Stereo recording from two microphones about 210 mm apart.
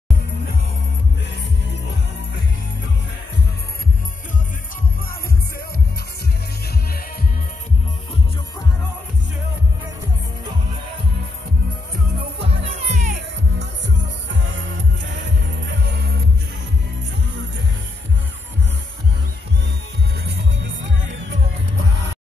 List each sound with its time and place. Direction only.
12.4 s music: 30° right (ahead or behind)
15.0 s music: 60° right (ahead or behind)
20.2 s music: 60° right (ahead or behind)